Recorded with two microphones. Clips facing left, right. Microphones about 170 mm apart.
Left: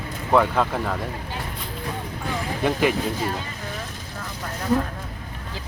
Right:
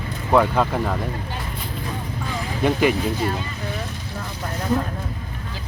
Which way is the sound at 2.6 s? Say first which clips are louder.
Right 3 dB; centre (ahead or behind).